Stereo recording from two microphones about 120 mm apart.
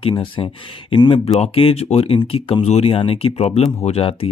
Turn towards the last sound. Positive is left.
turn(degrees=55)  # may be behind; listen again after turning